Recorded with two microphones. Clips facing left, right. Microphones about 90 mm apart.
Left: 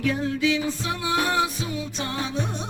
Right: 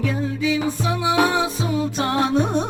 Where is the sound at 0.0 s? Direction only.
5° right (ahead or behind).